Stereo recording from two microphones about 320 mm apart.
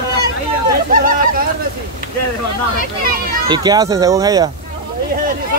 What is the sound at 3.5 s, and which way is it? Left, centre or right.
Speech, centre.